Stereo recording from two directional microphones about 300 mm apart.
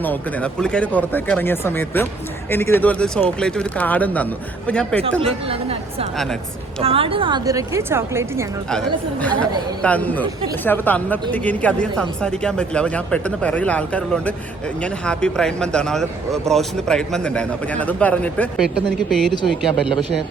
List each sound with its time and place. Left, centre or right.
0.0 s speech: centre
5.2 s a woman's voice: centre
8.7 s speech: centre